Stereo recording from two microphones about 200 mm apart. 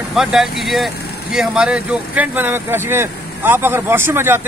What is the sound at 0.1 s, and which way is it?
Speech, centre (ahead or behind).